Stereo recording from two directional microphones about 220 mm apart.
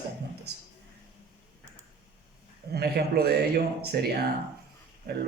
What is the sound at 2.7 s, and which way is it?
Speech, 45° right (ahead or behind).